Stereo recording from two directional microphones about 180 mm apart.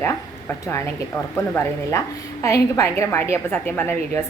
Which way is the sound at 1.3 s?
10° left (ahead or behind).